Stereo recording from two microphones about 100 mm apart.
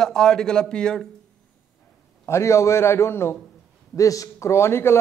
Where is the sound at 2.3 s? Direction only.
30° left (ahead or behind).